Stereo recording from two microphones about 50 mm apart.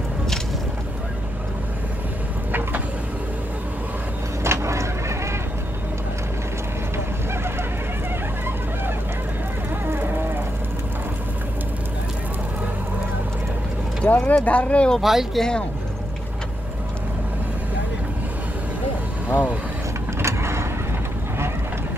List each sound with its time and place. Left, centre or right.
4.4 s vehicle: right
9.8 s a sound: right
14.0 s speech: left
15.0 s speech: centre
15.3 s speech: centre
20.2 s vehicle: right